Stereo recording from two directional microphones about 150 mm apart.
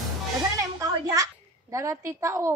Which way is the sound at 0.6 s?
20° right (ahead or behind).